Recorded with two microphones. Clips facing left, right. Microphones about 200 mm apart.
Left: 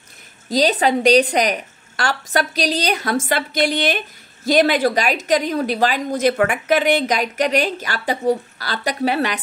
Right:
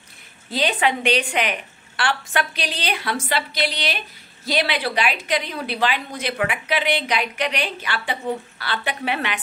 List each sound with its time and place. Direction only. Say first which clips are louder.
0.5 s a woman's voice: left 5 dB; 40° left (ahead or behind)